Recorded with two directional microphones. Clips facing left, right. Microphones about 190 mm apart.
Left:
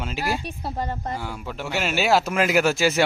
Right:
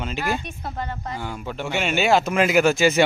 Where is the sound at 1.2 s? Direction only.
5° left (ahead or behind).